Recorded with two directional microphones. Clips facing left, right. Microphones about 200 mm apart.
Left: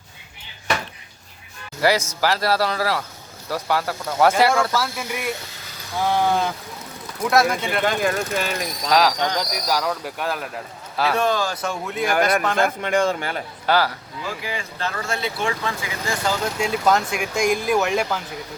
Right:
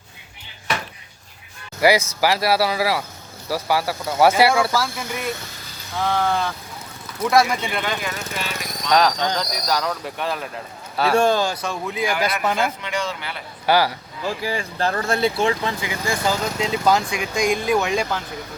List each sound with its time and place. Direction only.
1.8 s speech: 10° right (ahead or behind)
4.8 s speech: 5° left (ahead or behind)
7.2 s speech: centre (ahead or behind)
7.9 s speech: 45° left (ahead or behind)
8.9 s speech: 5° left (ahead or behind)
11.1 s speech: 30° right (ahead or behind)
11.6 s speech: centre (ahead or behind)
12.0 s speech: 45° left (ahead or behind)
13.7 s speech: 10° right (ahead or behind)
14.4 s speech: 35° right (ahead or behind)
16.6 s speech: 5° left (ahead or behind)